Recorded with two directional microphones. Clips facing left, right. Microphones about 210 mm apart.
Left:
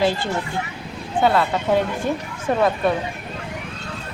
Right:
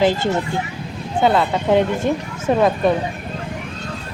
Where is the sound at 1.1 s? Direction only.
20° right (ahead or behind).